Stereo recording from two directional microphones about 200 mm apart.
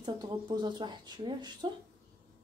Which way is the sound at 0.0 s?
20° right (ahead or behind).